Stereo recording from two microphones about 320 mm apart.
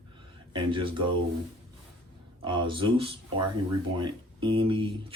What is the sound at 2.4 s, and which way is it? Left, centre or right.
Speech, centre.